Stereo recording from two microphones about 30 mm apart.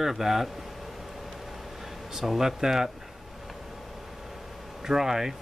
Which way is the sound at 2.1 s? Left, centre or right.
Centre.